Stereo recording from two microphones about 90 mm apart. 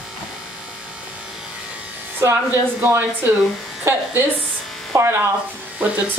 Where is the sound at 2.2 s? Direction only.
25° right (ahead or behind).